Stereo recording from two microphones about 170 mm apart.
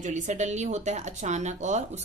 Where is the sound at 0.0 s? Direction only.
45° right (ahead or behind).